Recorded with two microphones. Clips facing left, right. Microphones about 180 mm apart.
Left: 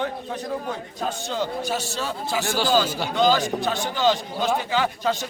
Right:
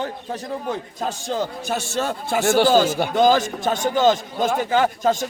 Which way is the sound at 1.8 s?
50° right (ahead or behind).